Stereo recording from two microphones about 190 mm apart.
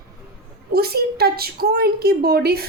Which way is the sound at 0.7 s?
55° right (ahead or behind).